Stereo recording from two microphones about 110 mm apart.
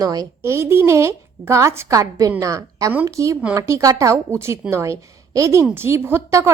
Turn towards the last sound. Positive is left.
turn(degrees=-25)  # may be behind; listen again after turning